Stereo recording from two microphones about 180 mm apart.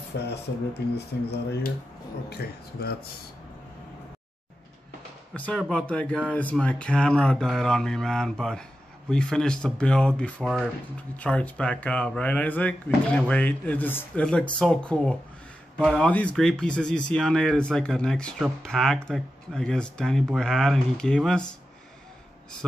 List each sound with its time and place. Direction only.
0.2 s speech: 65° left (ahead or behind)
5.3 s speech: 5° left (ahead or behind)